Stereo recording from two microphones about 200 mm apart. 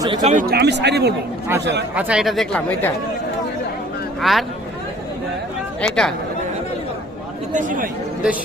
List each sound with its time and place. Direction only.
0.2 s speech: 40° right (ahead or behind); by 1.1 s 55° right (ahead or behind)
2.0 s speech: 5° right (ahead or behind)
4.2 s speech: centre (ahead or behind)
5.8 s speech: 5° left (ahead or behind)
7.5 s speech: 40° right (ahead or behind)